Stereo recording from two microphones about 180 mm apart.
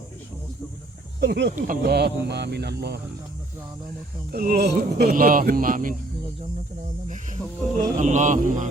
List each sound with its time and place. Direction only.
1.2 s speech: 65° right (ahead or behind)
1.5 s speech: 50° right (ahead or behind)
1.8 s speech: 65° right (ahead or behind)
4.3 s speech: 55° right (ahead or behind)
7.9 s speech: 40° right (ahead or behind)